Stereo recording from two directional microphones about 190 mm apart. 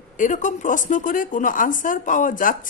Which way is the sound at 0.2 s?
40° left (ahead or behind).